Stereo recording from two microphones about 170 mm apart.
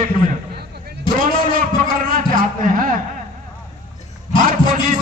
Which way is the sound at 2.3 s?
55° right (ahead or behind).